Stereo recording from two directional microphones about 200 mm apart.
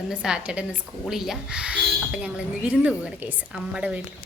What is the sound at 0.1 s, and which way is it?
Speech, 5° right (ahead or behind).